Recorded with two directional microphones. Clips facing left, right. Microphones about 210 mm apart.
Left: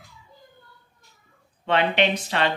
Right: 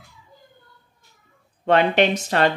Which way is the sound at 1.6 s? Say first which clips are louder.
Right 4 dB; 45° right (ahead or behind).